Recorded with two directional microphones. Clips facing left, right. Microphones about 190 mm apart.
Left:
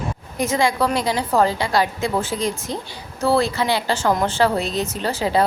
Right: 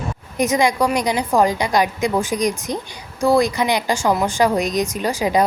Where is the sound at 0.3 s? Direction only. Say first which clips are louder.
Right 2 dB; 15° right (ahead or behind).